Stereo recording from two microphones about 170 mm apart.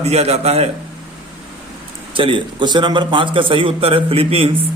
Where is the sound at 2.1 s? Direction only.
30° right (ahead or behind).